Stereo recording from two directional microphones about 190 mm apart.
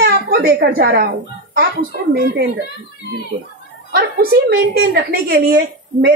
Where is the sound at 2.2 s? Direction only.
60° right (ahead or behind).